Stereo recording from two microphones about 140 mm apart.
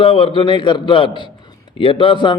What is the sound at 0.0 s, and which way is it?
A man's voice, 40° left (ahead or behind).